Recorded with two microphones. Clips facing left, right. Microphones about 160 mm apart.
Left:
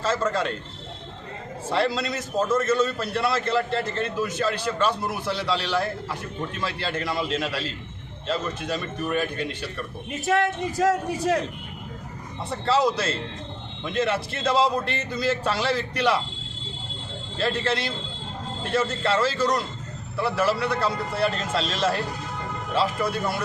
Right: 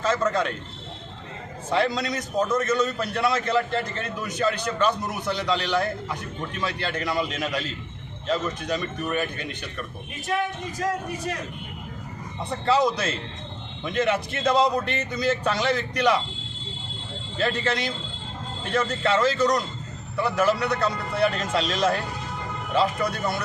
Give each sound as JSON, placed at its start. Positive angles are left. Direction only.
{"t": 0.0, "sound": "a man's voice", "side_deg": 5}
{"t": 1.7, "sound": "a man's voice", "side_deg": 5}
{"t": 10.2, "sound": "speech", "side_deg": 90}
{"t": 12.5, "sound": "a man's voice", "side_deg": 5}
{"t": 14.1, "sound": "a man's voice", "side_deg": 5}
{"t": 17.3, "sound": "a man's voice", "side_deg": 0}